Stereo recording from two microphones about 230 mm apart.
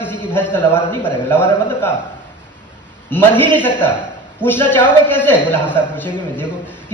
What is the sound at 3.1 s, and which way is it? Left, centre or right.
A man's voice, centre.